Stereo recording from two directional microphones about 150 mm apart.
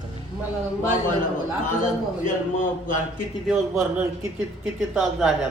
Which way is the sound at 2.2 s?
60° left (ahead or behind).